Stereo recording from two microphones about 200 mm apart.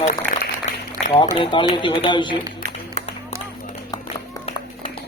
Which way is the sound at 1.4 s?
25° left (ahead or behind).